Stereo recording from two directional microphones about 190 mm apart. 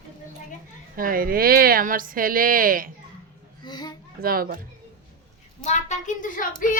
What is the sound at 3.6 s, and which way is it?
Speech, 20° left (ahead or behind).